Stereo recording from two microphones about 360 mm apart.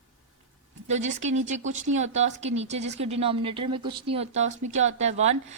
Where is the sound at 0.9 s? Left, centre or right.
Centre.